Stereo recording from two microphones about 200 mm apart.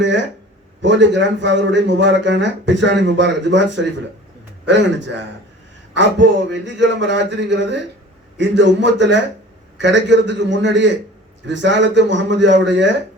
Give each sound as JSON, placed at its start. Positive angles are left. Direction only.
{"t": 0.8, "sound": "a man's voice", "side_deg": -65}